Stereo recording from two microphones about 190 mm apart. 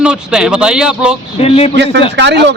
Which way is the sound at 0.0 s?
5° right (ahead or behind).